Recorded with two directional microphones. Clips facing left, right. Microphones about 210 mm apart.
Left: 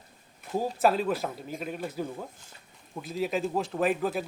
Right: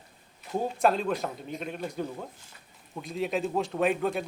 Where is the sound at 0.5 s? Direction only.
5° left (ahead or behind).